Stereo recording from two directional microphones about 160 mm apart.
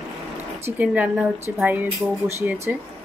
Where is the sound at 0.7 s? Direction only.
10° right (ahead or behind).